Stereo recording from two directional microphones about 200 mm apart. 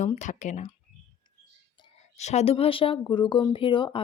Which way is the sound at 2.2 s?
35° left (ahead or behind).